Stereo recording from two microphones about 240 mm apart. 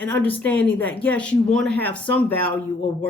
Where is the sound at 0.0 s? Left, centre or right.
Centre.